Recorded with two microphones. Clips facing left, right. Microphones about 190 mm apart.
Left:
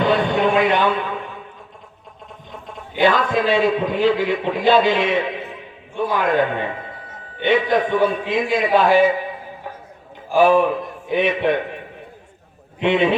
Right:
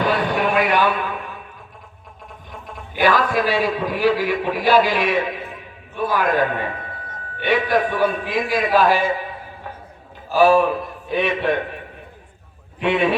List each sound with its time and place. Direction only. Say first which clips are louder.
0.0 s a sound: left 3 dB; 25° left (ahead or behind)
2.5 s a man's voice: left 1 dB; 25° left (ahead or behind)
10.3 s a man's voice: even; 20° left (ahead or behind)
12.8 s a man's voice: left 2 dB; 25° left (ahead or behind)